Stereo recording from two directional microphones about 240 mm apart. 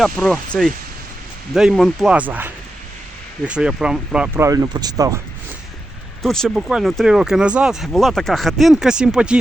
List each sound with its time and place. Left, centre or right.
0.0 s speech: centre
6.2 s speech: centre